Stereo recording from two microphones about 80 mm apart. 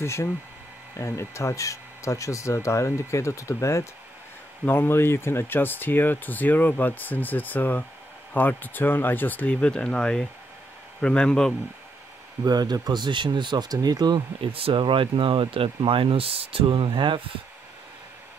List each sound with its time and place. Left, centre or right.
0.0 s speech: left; by 11.5 s centre
12.4 s speech: right